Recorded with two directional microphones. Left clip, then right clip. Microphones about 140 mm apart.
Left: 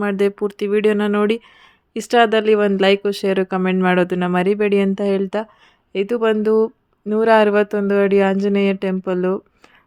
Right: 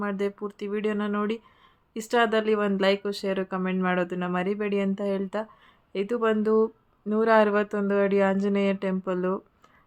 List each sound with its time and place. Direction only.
0.0 s speech: 60° left (ahead or behind)
5.9 s speech: 40° left (ahead or behind)